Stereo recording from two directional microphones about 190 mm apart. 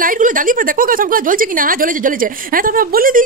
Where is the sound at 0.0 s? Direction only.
45° right (ahead or behind).